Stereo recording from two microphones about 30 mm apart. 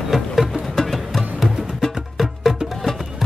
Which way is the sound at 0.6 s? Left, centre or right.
Centre.